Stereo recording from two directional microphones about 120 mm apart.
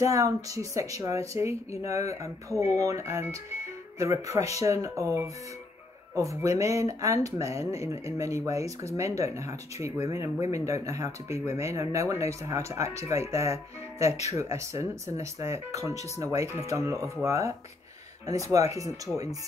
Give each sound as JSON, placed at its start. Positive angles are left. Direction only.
{"t": 0.0, "sound": "speech", "side_deg": -25}
{"t": 18.5, "sound": "speech", "side_deg": -30}